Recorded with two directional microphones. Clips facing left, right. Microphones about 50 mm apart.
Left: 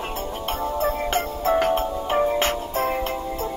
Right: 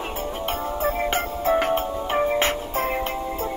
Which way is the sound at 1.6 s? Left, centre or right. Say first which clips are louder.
Left 1 dB; centre.